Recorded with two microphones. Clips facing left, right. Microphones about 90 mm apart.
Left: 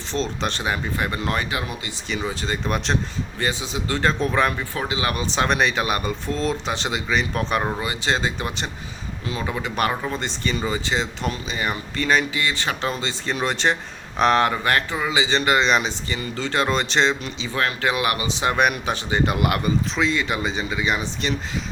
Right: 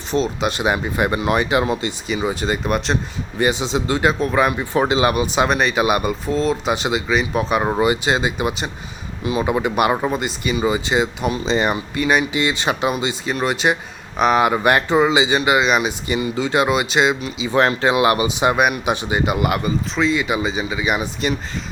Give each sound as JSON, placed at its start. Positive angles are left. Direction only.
{"t": 0.1, "sound": "speech", "side_deg": -10}
{"t": 1.5, "sound": "speech", "side_deg": -30}
{"t": 2.0, "sound": "speech", "side_deg": -10}
{"t": 3.3, "sound": "speech", "side_deg": -15}
{"t": 4.5, "sound": "speech", "side_deg": -20}
{"t": 5.1, "sound": "speech", "side_deg": -10}
{"t": 7.7, "sound": "speech", "side_deg": -20}
{"t": 11.4, "sound": "speech", "side_deg": -25}
{"t": 13.3, "sound": "speech", "side_deg": -5}
{"t": 14.5, "sound": "speech", "side_deg": -15}
{"t": 17.5, "sound": "speech", "side_deg": -25}
{"t": 18.3, "sound": "speech", "side_deg": -10}